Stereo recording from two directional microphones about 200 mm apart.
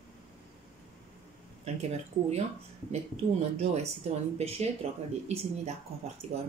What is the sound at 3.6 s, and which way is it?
Speech, 30° right (ahead or behind).